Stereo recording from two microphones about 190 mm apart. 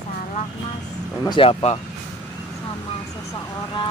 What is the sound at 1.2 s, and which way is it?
Speech, 25° left (ahead or behind).